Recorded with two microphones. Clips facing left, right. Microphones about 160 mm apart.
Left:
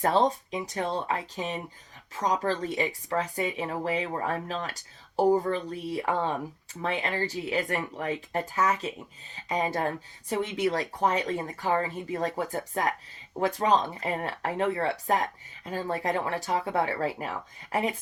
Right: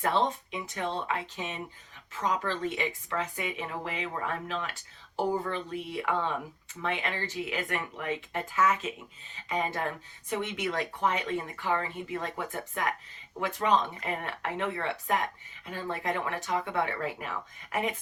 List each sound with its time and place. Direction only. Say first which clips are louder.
0.0 s speech: left 4 dB; 35° left (ahead or behind)